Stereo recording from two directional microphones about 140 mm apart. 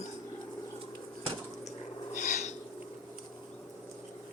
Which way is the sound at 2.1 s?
60° left (ahead or behind).